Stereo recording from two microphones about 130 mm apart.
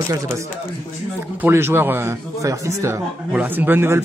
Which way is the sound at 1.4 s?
20° right (ahead or behind).